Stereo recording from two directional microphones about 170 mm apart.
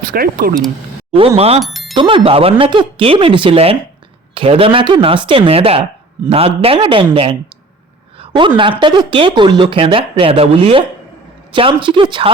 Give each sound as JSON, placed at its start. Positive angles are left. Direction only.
{"t": 0.1, "sound": "speech", "side_deg": -60}
{"t": 1.4, "sound": "speech", "side_deg": -35}
{"t": 1.6, "sound": "a sound", "side_deg": 0}
{"t": 1.9, "sound": "a woman's voice", "side_deg": -30}